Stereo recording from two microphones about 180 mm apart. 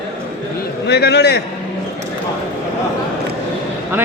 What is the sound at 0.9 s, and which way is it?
Speech, 65° left (ahead or behind).